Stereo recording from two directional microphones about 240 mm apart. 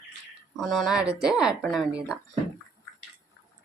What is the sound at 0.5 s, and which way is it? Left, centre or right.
Speech, centre.